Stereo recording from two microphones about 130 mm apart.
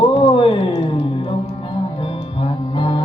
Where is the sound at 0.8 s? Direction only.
45° left (ahead or behind).